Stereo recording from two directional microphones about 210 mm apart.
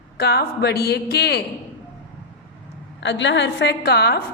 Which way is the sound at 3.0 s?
55° left (ahead or behind).